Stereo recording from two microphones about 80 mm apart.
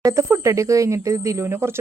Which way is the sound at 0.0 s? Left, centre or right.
Right.